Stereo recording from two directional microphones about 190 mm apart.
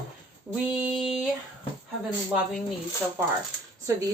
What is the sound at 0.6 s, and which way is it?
Speech, 10° right (ahead or behind).